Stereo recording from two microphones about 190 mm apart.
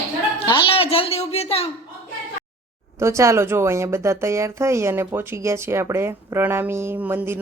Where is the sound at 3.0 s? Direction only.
15° right (ahead or behind).